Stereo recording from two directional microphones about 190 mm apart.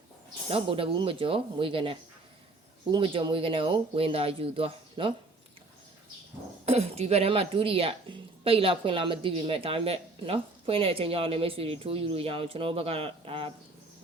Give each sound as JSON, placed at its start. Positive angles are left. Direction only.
{"t": 0.5, "sound": "speech", "side_deg": -30}
{"t": 6.7, "sound": "speech", "side_deg": -35}